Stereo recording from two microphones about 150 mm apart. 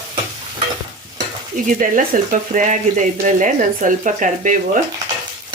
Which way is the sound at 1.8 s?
60° right (ahead or behind).